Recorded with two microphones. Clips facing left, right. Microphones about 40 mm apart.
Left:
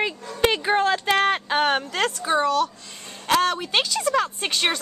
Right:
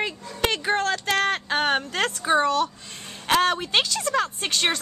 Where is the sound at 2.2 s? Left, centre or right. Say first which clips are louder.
Right 1 dB; centre.